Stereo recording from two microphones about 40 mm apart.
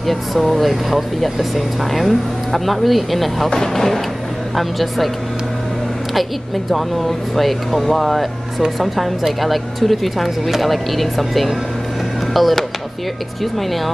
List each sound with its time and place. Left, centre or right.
0.0 s speech: centre
6.7 s speech: centre